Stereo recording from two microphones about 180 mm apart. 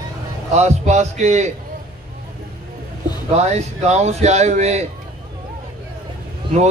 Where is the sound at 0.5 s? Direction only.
40° right (ahead or behind).